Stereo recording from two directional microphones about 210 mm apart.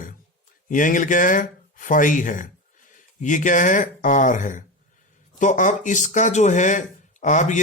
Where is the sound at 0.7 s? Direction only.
40° left (ahead or behind).